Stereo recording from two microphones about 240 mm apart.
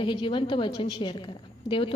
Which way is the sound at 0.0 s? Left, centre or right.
Centre.